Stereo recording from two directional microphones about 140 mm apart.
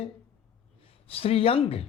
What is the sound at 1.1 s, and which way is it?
Speech, 45° left (ahead or behind).